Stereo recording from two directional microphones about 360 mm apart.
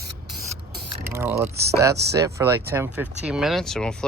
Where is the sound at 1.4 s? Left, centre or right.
Right.